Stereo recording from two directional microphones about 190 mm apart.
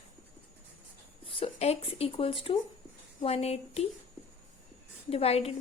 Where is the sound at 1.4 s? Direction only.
35° left (ahead or behind).